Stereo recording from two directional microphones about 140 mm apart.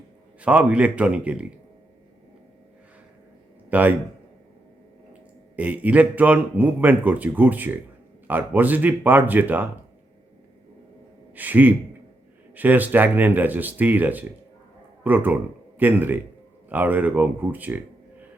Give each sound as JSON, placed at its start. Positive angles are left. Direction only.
{"t": 0.4, "sound": "speech", "side_deg": -10}
{"t": 3.7, "sound": "a man's voice", "side_deg": -10}
{"t": 5.5, "sound": "speech", "side_deg": -10}
{"t": 11.3, "sound": "speech", "side_deg": -10}